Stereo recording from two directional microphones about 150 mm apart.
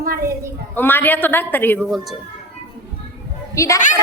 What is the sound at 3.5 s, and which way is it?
Speech, 20° left (ahead or behind).